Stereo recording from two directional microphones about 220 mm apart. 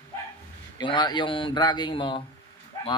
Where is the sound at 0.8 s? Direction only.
20° left (ahead or behind).